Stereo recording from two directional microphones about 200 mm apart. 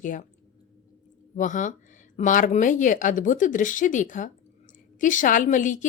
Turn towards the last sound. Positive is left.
turn(degrees=40)  # may be behind; listen again after turning